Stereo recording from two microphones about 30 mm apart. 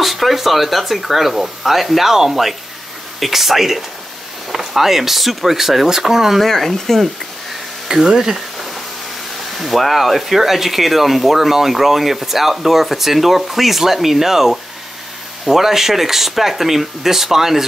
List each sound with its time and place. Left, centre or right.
0.0 s speech: centre
6.4 s speech: centre
7.9 s speech: centre
9.6 s speech: centre